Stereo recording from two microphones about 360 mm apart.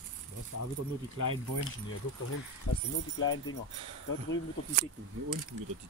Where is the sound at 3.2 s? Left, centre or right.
Left.